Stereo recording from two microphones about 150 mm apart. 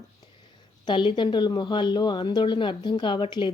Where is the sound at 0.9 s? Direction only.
30° left (ahead or behind).